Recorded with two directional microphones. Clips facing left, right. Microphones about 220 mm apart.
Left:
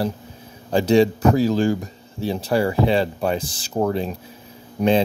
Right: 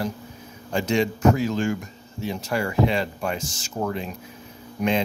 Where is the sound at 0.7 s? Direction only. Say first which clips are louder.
Left 7 dB; 35° left (ahead or behind).